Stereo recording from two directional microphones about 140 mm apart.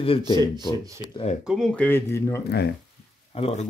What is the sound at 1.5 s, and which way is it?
Speech, centre (ahead or behind).